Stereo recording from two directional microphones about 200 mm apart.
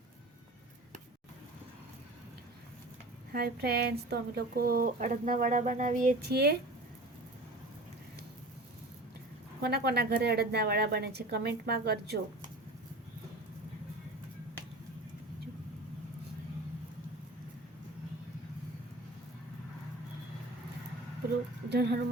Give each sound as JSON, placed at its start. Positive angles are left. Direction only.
{"t": 3.3, "sound": "a woman's voice", "side_deg": -50}
{"t": 6.1, "sound": "a woman's voice", "side_deg": -55}
{"t": 9.6, "sound": "a woman's voice", "side_deg": -55}
{"t": 21.7, "sound": "speech", "side_deg": -55}